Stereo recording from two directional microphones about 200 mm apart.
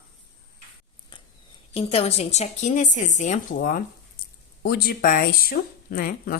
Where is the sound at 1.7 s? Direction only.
30° left (ahead or behind).